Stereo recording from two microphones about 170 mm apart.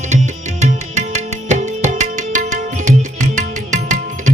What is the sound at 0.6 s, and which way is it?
Music, 45° right (ahead or behind).